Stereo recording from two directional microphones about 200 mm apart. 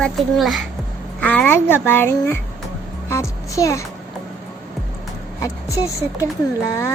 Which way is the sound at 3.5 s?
15° left (ahead or behind).